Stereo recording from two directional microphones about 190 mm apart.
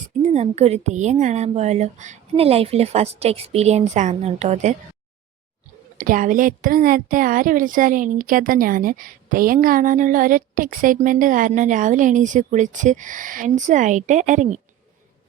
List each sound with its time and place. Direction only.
0.2 s a woman's voice: 35° right (ahead or behind)
6.0 s a woman's voice: 45° right (ahead or behind)